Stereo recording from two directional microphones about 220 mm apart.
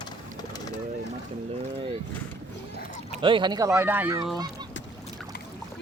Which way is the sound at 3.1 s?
25° right (ahead or behind).